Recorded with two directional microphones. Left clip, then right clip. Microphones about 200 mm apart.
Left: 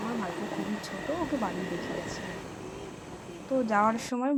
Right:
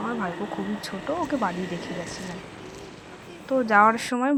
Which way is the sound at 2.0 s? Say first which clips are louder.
Right 2 dB; centre (ahead or behind).